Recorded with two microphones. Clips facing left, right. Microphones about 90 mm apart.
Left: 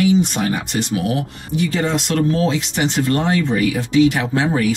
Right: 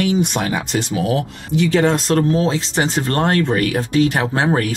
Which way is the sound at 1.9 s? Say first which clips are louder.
Right 1 dB; 40° right (ahead or behind).